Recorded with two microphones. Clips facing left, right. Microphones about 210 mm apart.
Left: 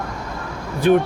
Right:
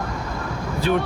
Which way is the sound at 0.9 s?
50° left (ahead or behind).